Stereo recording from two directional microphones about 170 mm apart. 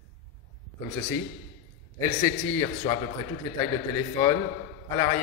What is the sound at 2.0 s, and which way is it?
Speech, 20° left (ahead or behind).